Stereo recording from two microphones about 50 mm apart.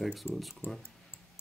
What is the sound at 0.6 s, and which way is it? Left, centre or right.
Speech, left.